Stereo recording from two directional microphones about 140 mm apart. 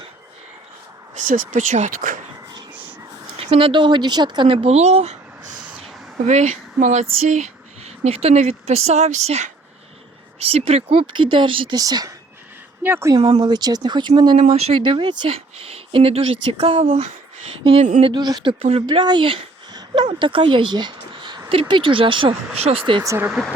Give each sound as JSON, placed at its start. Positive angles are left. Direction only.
{"t": 1.1, "sound": "speech", "side_deg": -70}
{"t": 3.3, "sound": "speech", "side_deg": -40}
{"t": 6.2, "sound": "speech", "side_deg": -55}
{"t": 6.7, "sound": "speech", "side_deg": -65}
{"t": 11.8, "sound": "speech", "side_deg": -25}
{"t": 13.3, "sound": "speech", "side_deg": -30}
{"t": 14.3, "sound": "speech", "side_deg": -50}
{"t": 16.8, "sound": "speech", "side_deg": -60}
{"t": 17.6, "sound": "speech", "side_deg": -45}
{"t": 18.0, "sound": "speech", "side_deg": -30}
{"t": 23.0, "sound": "speech", "side_deg": -15}